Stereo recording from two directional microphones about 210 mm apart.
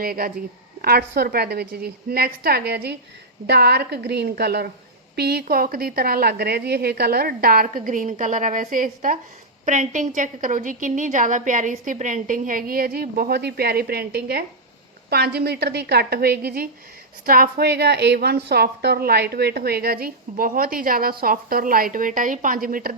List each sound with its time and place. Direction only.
0.0 s a woman's voice: 45° right (ahead or behind)